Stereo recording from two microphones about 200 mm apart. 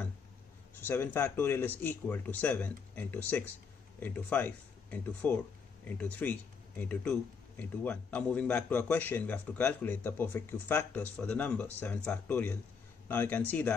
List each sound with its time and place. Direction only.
0.7 s speech: 10° left (ahead or behind)